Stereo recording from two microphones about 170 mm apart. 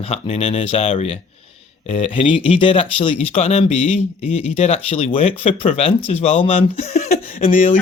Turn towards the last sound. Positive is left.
turn(degrees=35)  # may be behind; listen again after turning